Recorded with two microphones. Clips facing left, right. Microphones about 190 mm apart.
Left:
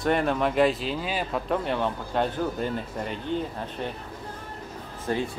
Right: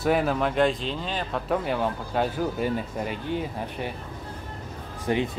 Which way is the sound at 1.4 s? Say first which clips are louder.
Right 3 dB; 5° right (ahead or behind).